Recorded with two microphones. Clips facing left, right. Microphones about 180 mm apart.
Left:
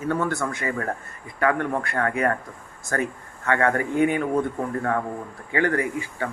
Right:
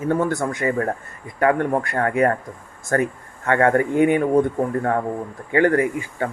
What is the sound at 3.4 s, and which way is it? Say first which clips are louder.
Speech: right 5 dB; 40° right (ahead or behind).